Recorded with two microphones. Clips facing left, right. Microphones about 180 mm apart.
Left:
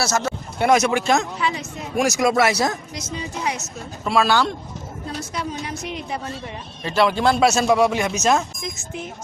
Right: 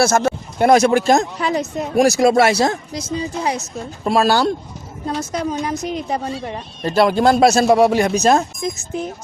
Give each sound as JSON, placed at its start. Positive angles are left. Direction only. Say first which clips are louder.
{"t": 0.0, "sound": "speech", "louder": "right 7 dB", "side_deg": -55}
{"t": 0.7, "sound": "a woman's voice", "louder": "right 5 dB", "side_deg": -35}